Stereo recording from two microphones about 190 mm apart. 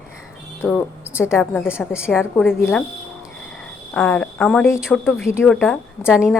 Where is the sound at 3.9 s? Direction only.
5° left (ahead or behind).